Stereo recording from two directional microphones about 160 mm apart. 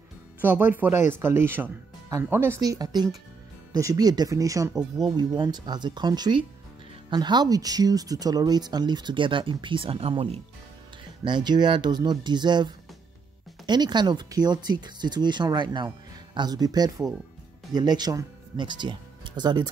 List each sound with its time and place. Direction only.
0.4 s speech: 10° right (ahead or behind); by 19.7 s 25° right (ahead or behind)